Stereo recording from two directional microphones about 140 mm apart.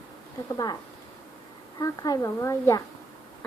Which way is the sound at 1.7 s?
25° left (ahead or behind).